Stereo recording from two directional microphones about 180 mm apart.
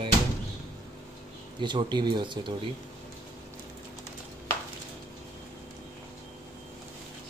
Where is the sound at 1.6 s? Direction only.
25° right (ahead or behind).